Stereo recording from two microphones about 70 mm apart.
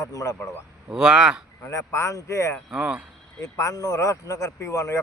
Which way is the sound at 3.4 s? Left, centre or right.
Left.